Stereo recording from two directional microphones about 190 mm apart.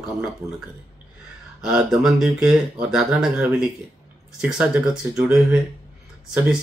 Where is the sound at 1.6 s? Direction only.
5° right (ahead or behind).